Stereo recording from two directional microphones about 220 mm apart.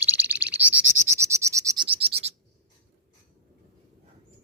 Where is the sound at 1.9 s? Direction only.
25° right (ahead or behind).